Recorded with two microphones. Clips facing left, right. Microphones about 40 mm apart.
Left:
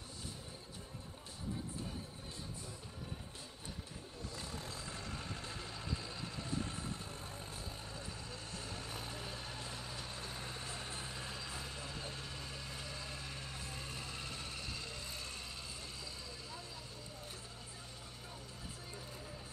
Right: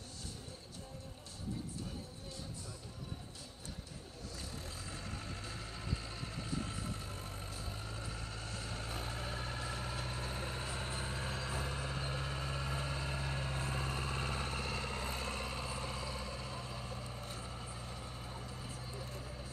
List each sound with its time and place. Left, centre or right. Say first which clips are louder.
4.4 s vehicle: left 1 dB; left
5.9 s vehicle: even; right